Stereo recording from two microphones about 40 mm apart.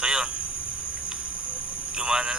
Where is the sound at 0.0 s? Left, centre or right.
Centre.